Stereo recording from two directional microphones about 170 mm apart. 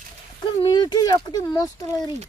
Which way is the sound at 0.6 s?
25° left (ahead or behind).